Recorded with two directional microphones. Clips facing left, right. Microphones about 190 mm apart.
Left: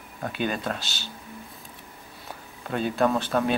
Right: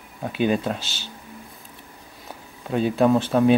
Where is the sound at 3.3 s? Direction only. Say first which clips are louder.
Right 6 dB; 15° right (ahead or behind).